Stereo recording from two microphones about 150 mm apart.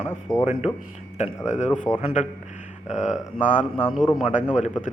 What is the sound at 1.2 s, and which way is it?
Speech, 55° left (ahead or behind).